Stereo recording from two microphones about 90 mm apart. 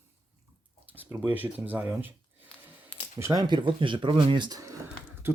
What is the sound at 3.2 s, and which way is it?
Speech, 35° right (ahead or behind).